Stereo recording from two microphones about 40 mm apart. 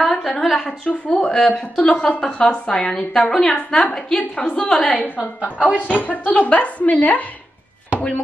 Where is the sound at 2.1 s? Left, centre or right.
Centre.